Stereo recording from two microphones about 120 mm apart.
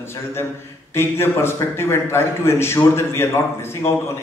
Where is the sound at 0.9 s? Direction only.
20° left (ahead or behind).